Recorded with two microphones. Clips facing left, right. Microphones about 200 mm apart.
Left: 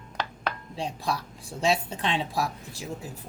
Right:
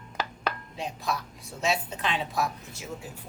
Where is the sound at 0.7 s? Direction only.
30° left (ahead or behind).